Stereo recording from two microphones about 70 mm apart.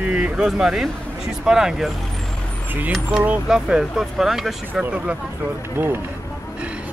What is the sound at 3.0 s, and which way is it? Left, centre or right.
Speech, right.